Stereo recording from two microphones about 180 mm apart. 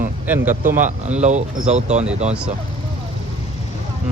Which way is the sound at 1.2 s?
40° right (ahead or behind).